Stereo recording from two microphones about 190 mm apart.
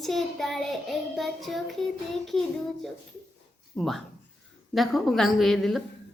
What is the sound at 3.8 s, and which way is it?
A woman's voice, centre (ahead or behind).